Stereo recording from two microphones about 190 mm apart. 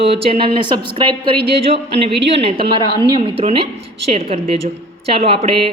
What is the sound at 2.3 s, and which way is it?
A man's voice, 30° right (ahead or behind).